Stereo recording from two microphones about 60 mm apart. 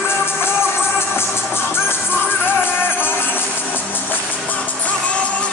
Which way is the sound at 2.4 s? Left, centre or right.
Left.